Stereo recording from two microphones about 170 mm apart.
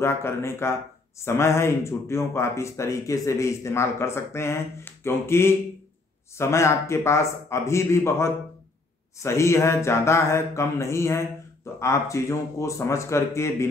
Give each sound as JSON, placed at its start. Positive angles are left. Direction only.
{"t": 0.0, "sound": "a man's voice", "side_deg": 15}